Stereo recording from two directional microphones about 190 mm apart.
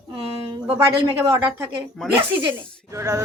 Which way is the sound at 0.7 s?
15° right (ahead or behind).